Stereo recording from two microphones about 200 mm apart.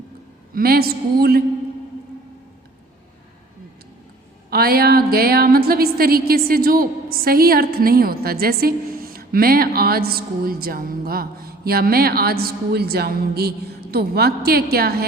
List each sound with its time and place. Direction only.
0.5 s a woman's voice: 50° right (ahead or behind)
4.4 s a woman's voice: 50° right (ahead or behind)